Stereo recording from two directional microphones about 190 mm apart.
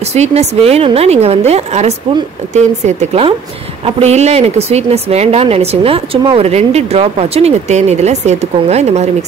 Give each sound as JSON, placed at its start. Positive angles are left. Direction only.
{"t": 0.1, "sound": "a woman's voice", "side_deg": -35}